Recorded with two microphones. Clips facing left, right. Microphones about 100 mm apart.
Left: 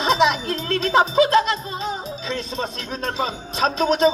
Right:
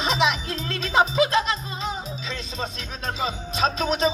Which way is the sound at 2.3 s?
45° left (ahead or behind).